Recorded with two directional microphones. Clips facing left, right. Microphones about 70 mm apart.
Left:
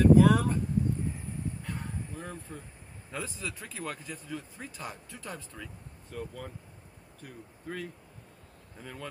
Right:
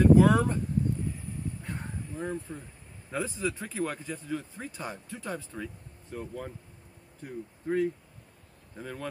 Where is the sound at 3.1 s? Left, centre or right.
Right.